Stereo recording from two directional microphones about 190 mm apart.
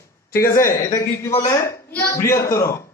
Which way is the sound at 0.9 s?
15° left (ahead or behind).